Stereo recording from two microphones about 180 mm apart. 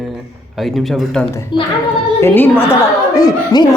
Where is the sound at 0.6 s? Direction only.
Centre (ahead or behind).